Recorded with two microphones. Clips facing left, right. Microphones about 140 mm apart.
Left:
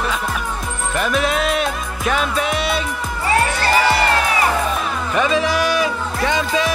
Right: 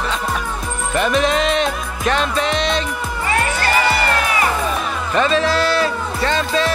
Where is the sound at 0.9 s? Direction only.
5° left (ahead or behind).